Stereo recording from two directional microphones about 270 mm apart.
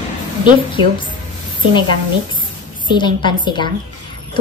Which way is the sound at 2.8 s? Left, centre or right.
Centre.